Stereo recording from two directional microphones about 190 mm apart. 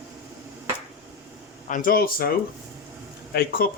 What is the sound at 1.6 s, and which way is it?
Speech, 45° left (ahead or behind).